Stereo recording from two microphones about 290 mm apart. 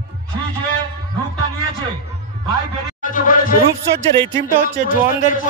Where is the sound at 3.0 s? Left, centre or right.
Left.